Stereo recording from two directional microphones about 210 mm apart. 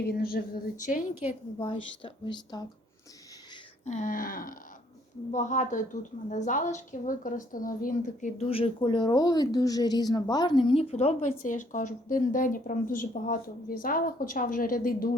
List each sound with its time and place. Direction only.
0.0 s speech: 45° left (ahead or behind)
1.2 s a woman's voice: 25° left (ahead or behind)
3.8 s a woman's voice: 35° left (ahead or behind)